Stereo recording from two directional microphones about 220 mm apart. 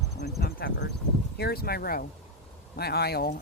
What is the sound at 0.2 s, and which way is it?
Speech, 45° left (ahead or behind).